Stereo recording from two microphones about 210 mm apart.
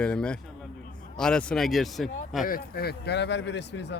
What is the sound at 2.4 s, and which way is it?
A man's voice, 45° left (ahead or behind).